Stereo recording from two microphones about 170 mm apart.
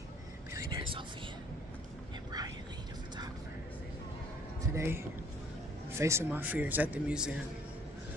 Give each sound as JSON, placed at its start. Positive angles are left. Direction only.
{"t": 0.5, "sound": "whispering", "side_deg": -20}
{"t": 4.7, "sound": "speech", "side_deg": -15}